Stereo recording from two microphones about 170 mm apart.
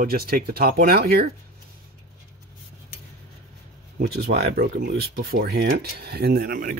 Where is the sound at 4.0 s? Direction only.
65° right (ahead or behind).